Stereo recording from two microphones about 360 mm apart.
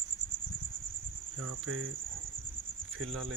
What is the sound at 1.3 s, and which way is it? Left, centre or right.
Cricket, right.